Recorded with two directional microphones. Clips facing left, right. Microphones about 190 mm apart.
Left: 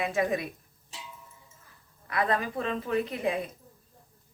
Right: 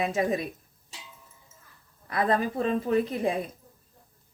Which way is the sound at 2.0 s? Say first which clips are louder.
Right 3 dB; 35° right (ahead or behind).